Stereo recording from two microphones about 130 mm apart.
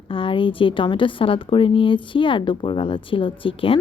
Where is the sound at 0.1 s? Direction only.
40° left (ahead or behind).